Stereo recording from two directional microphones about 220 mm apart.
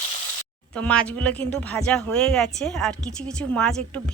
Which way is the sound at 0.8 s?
5° left (ahead or behind).